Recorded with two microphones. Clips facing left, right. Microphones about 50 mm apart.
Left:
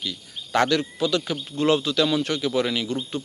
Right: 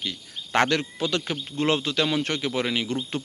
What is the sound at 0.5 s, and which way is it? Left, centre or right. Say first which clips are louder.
Speech: left 1 dB; right.